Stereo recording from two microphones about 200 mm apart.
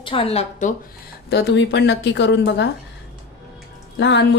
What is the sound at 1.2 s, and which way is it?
Speech, 60° left (ahead or behind).